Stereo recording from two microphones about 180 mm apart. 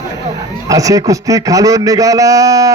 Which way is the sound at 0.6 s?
20° right (ahead or behind).